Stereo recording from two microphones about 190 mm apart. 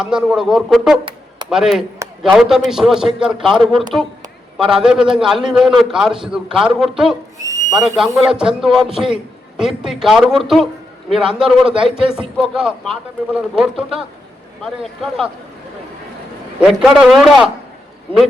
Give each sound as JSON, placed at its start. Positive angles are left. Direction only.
{"t": 0.0, "sound": "a man's voice", "side_deg": -5}
{"t": 7.3, "sound": "owl", "side_deg": -15}
{"t": 7.9, "sound": "a man's voice", "side_deg": 0}
{"t": 16.6, "sound": "a man's voice", "side_deg": -5}